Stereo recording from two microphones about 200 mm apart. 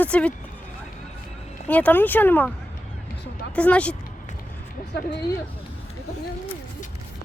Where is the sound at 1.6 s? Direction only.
10° left (ahead or behind).